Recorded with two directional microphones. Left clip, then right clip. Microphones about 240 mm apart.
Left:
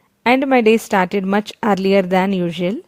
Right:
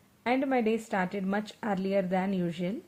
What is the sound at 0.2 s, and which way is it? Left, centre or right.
Speech, left.